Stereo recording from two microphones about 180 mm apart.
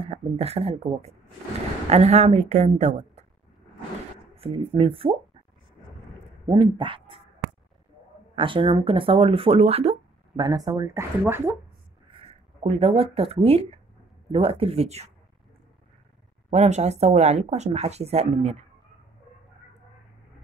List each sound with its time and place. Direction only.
0.0 s speech: 35° right (ahead or behind)
4.4 s speech: 30° right (ahead or behind)
6.5 s speech: 30° right (ahead or behind)
8.4 s speech: 30° right (ahead or behind)
10.4 s speech: 20° right (ahead or behind)
12.1 s speech: 30° right (ahead or behind)
16.4 s speech: 40° right (ahead or behind)